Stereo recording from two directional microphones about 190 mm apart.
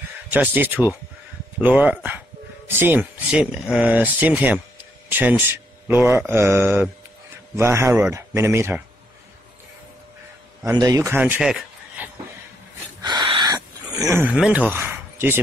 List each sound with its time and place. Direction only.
0.3 s speech: 10° right (ahead or behind)
10.6 s a man's voice: 20° right (ahead or behind)
13.0 s a sound: 25° right (ahead or behind)
14.2 s speech: 5° right (ahead or behind)